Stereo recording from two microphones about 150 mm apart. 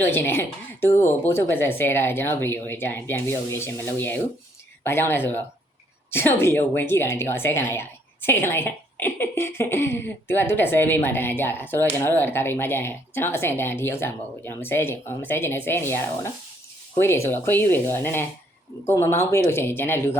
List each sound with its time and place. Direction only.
0.0 s a woman's voice: 15° left (ahead or behind)